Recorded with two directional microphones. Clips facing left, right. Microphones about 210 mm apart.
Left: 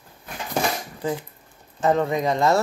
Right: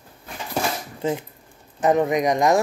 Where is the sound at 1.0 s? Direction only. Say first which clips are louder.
Right 5 dB; 20° right (ahead or behind).